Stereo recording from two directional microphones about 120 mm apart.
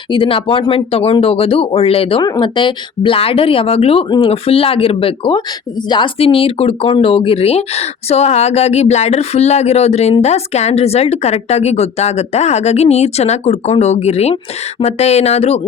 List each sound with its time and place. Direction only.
0.1 s speech: 45° left (ahead or behind)
2.2 s speech: 35° left (ahead or behind); by 15.6 s 60° left (ahead or behind)